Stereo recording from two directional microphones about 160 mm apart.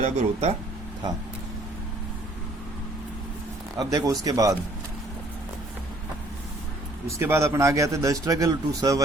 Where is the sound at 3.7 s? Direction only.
25° right (ahead or behind).